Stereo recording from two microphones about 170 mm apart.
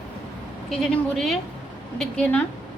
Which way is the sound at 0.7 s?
5° left (ahead or behind).